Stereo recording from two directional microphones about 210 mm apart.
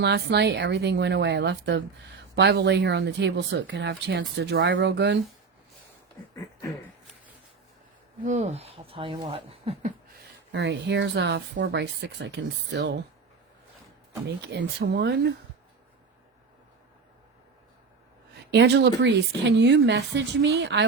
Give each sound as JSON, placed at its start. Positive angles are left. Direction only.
{"t": 0.0, "sound": "a woman's voice", "side_deg": -55}
{"t": 6.3, "sound": "a sound", "side_deg": 15}
{"t": 8.2, "sound": "speech", "side_deg": -35}
{"t": 10.5, "sound": "a woman's voice", "side_deg": -55}
{"t": 14.3, "sound": "speech", "side_deg": -55}
{"t": 18.3, "sound": "a woman's voice", "side_deg": -55}